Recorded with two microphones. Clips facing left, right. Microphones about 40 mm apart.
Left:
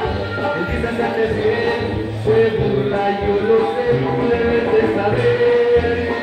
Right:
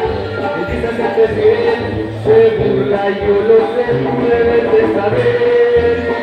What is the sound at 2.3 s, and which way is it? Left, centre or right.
Music, right.